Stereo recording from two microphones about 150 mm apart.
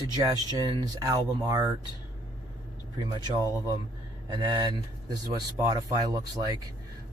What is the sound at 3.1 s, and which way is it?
Speech, 25° right (ahead or behind).